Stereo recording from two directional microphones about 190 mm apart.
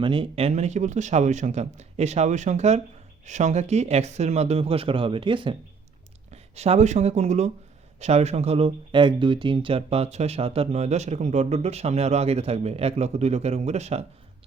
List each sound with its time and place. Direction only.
0.0 s speech: 25° right (ahead or behind)